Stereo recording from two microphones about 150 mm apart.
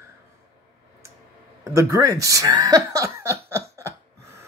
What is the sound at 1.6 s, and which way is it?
Speech, 20° right (ahead or behind).